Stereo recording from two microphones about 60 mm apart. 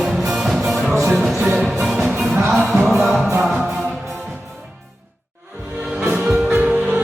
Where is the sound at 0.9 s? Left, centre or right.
Right.